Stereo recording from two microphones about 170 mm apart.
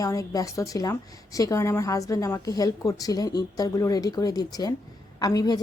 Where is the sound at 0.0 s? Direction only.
20° left (ahead or behind).